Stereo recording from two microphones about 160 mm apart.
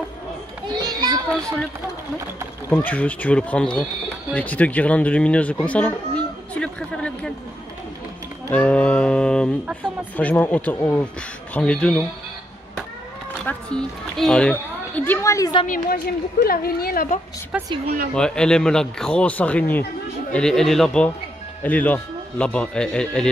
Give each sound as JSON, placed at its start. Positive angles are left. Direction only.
{"t": 0.7, "sound": "children playing", "side_deg": -25}
{"t": 2.7, "sound": "speech", "side_deg": 10}
{"t": 8.5, "sound": "music", "side_deg": 10}
{"t": 10.1, "sound": "speech", "side_deg": 10}
{"t": 13.5, "sound": "speech", "side_deg": 5}
{"t": 15.6, "sound": "speech", "side_deg": 55}
{"t": 16.4, "sound": "speech", "side_deg": 70}
{"t": 18.1, "sound": "speech", "side_deg": 5}